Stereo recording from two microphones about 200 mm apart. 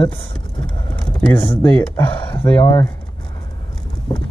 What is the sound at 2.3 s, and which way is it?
Speech, 25° left (ahead or behind).